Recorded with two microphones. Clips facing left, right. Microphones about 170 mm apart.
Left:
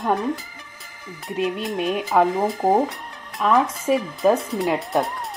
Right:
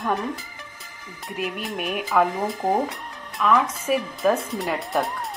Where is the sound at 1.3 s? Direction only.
25° left (ahead or behind).